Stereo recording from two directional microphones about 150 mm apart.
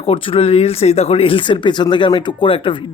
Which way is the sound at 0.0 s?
40° left (ahead or behind).